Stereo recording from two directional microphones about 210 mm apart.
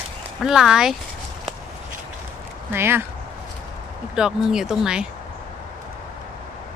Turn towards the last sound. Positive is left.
turn(degrees=-5)  # may be behind; listen again after turning